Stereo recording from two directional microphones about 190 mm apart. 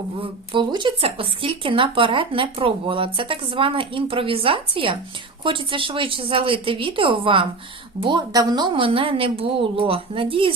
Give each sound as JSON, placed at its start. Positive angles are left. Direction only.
{"t": 0.2, "sound": "speech", "side_deg": -25}